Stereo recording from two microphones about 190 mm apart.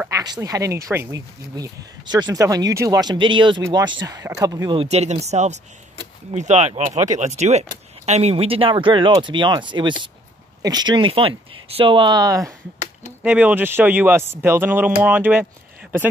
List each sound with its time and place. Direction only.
0.0 s speech: 20° right (ahead or behind)
4.8 s speech: 35° right (ahead or behind); by 12.5 s 15° right (ahead or behind)
13.2 s speech: 5° right (ahead or behind)